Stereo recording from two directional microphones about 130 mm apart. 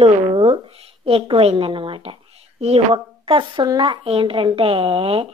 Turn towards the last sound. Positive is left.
turn(degrees=-45)  # may be behind; listen again after turning